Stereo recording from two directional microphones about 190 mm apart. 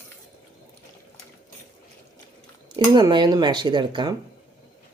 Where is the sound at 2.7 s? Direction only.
20° right (ahead or behind).